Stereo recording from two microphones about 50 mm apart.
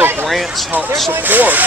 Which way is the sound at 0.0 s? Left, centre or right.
Right.